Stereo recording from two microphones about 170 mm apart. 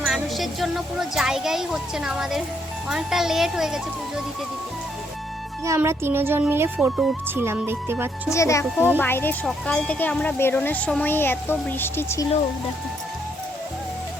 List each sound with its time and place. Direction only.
0.0 s speech: centre (ahead or behind)
5.6 s speech: 15° right (ahead or behind)
8.3 s speech: 15° left (ahead or behind)